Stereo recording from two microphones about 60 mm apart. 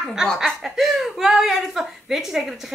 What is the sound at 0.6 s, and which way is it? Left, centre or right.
A woman's voice, centre.